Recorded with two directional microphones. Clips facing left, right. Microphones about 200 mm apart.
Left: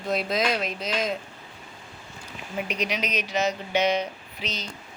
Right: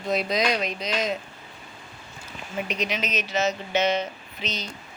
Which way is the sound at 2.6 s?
10° left (ahead or behind).